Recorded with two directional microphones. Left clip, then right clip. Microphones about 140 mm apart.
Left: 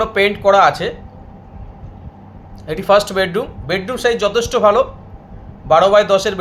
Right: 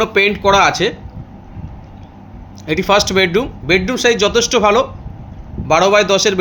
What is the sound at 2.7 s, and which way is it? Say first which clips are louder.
Speech: even; 35° right (ahead or behind).